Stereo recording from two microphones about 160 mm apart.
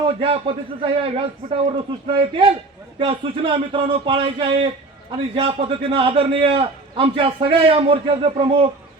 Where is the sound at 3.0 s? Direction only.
35° right (ahead or behind).